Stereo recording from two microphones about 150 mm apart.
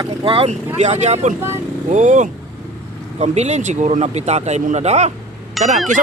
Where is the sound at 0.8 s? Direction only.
50° right (ahead or behind).